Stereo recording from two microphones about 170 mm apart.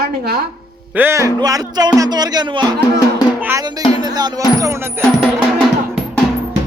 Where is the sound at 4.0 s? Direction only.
25° right (ahead or behind).